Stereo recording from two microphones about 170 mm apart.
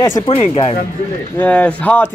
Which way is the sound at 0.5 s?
35° left (ahead or behind).